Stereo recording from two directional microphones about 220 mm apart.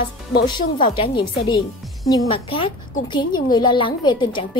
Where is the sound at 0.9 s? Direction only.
25° left (ahead or behind).